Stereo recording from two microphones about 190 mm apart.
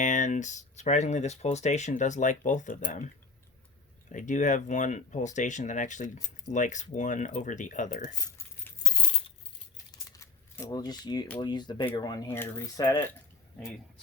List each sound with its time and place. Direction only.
0.0 s speech: 40° left (ahead or behind)
4.1 s speech: 40° left (ahead or behind)
8.2 s keys jangling: 15° left (ahead or behind)
9.9 s a sound: 15° left (ahead or behind)
11.3 s speech: 25° left (ahead or behind)